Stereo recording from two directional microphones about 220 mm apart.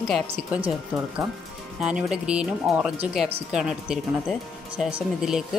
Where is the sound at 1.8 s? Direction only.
5° right (ahead or behind).